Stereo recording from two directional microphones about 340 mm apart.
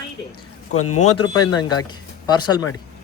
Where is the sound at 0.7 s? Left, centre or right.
Left.